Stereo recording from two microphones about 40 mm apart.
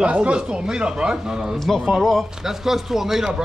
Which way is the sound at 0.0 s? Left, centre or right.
Right.